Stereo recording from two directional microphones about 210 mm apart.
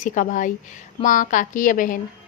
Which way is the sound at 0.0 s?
35° left (ahead or behind).